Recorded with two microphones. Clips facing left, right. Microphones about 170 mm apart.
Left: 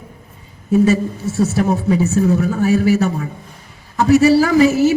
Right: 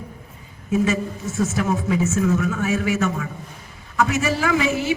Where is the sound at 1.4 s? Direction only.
35° left (ahead or behind).